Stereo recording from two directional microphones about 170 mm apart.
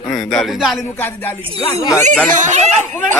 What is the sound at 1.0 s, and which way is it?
Speech, 10° left (ahead or behind).